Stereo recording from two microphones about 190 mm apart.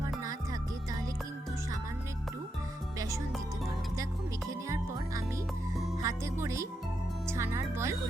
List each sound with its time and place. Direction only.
4.4 s music: 15° right (ahead or behind)
5.7 s music: centre (ahead or behind)
6.0 s music: 15° right (ahead or behind)
6.4 s speech: 15° right (ahead or behind)